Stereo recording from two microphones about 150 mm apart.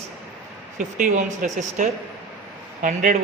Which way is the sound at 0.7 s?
55° right (ahead or behind).